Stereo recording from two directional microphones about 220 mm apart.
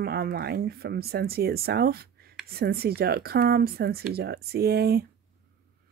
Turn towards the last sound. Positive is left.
turn(degrees=-45)  # may be behind; listen again after turning